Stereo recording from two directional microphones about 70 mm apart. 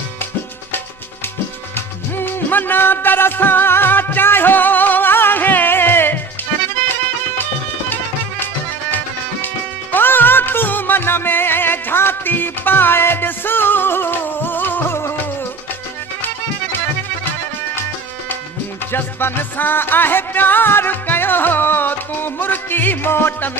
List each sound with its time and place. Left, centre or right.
1.7 s music: left
9.9 s music: left
18.9 s music: left